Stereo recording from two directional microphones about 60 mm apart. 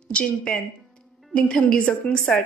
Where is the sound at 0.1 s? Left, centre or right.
Centre.